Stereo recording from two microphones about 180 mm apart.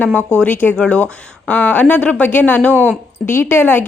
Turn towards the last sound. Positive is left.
turn(degrees=10)  # may be behind; listen again after turning